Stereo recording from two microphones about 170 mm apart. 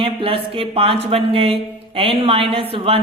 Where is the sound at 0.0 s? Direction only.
30° right (ahead or behind).